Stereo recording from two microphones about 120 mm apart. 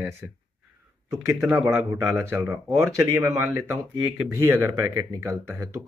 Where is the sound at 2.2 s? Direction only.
20° right (ahead or behind).